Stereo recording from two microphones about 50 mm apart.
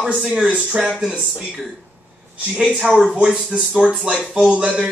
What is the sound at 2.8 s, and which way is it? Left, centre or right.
Speech, centre.